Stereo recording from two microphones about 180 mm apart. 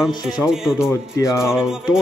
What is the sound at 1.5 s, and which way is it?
Speech, 5° right (ahead or behind).